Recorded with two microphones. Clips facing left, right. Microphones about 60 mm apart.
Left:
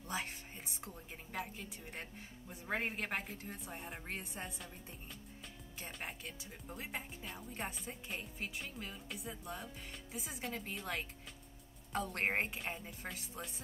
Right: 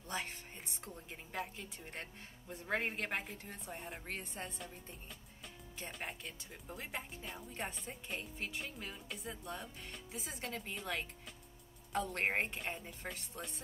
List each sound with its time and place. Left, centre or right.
0.1 s speech: centre
5.8 s speech: centre